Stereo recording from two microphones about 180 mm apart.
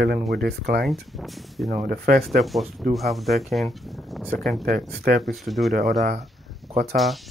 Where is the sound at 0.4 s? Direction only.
65° right (ahead or behind).